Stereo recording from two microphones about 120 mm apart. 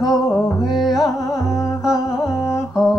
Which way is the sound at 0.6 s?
Centre (ahead or behind).